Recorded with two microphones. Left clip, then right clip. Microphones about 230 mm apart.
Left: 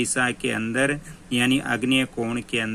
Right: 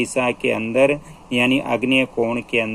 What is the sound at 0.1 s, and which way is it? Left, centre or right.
Speech, left.